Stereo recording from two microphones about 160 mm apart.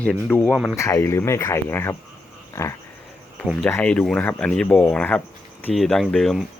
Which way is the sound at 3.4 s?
Centre (ahead or behind).